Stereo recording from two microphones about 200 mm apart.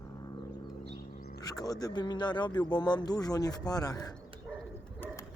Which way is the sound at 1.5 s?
20° left (ahead or behind).